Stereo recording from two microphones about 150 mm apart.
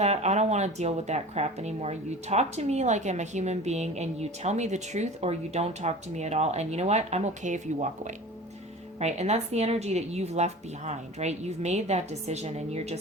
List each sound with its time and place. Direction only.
0.0 s a woman's voice: 50° right (ahead or behind)